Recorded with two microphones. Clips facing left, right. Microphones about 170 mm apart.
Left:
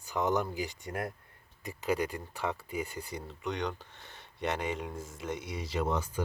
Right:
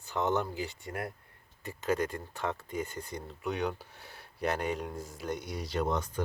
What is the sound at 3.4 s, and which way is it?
Speech, 5° right (ahead or behind).